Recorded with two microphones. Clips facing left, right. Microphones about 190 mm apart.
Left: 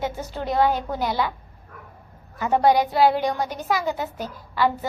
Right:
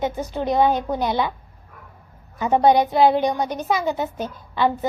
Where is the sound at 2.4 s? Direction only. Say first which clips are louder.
Right 2 dB; 20° right (ahead or behind).